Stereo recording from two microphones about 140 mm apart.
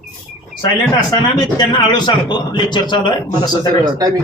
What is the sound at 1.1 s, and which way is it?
A man's voice, 30° left (ahead or behind).